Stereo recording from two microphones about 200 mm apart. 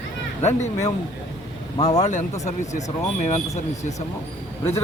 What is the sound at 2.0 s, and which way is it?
Speech, 35° left (ahead or behind).